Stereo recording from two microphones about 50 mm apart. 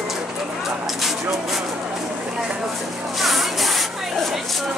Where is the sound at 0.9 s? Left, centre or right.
Centre.